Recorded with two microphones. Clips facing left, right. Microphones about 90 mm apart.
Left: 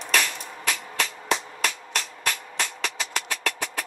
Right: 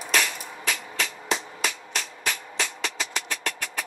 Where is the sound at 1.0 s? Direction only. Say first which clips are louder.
Left 3 dB; centre (ahead or behind).